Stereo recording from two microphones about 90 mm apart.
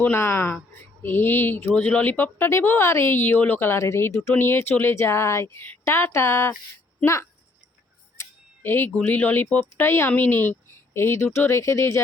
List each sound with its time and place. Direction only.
0.0 s speech: 25° left (ahead or behind)
8.2 s a sound: 25° left (ahead or behind)
9.0 s speech: 15° left (ahead or behind); by 12.0 s 30° left (ahead or behind)